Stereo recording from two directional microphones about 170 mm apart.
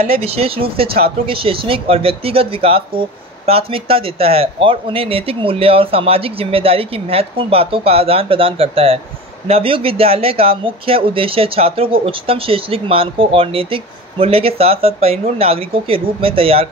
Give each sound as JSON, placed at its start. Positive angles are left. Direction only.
{"t": 0.2, "sound": "speech", "side_deg": -35}